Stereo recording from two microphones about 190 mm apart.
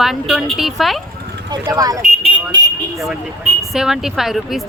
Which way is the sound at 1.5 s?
20° right (ahead or behind).